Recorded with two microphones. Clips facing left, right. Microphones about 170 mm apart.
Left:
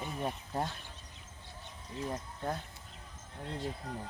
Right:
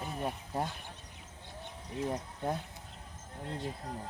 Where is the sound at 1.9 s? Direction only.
20° right (ahead or behind).